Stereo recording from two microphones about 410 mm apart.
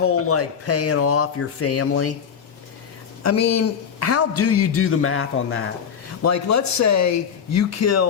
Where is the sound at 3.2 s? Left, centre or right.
Left.